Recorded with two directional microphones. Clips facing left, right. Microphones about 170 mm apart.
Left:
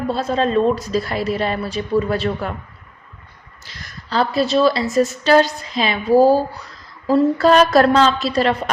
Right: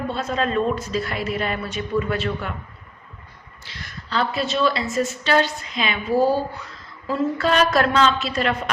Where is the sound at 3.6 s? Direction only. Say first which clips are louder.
Left 1 dB; 40° left (ahead or behind).